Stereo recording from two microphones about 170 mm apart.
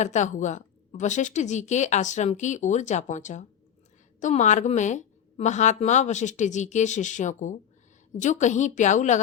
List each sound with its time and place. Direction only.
0.0 s a woman's voice: 45° left (ahead or behind)